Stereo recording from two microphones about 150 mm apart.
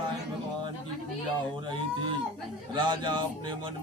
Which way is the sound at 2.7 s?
30° right (ahead or behind).